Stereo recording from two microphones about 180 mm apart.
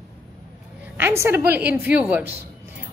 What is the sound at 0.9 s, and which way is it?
A woman's voice, 10° right (ahead or behind).